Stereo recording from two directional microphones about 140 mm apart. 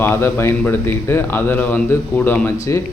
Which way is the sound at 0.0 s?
15° left (ahead or behind).